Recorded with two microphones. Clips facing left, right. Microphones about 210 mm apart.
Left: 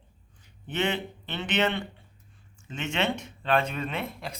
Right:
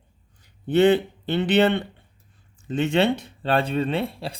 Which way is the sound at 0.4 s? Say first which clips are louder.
Right 12 dB; 35° right (ahead or behind).